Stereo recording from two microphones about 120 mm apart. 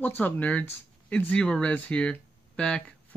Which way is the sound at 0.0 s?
15° left (ahead or behind).